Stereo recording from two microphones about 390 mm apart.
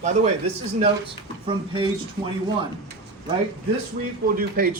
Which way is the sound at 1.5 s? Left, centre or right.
Centre.